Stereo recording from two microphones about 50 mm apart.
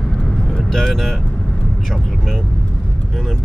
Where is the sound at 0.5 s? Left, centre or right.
Centre.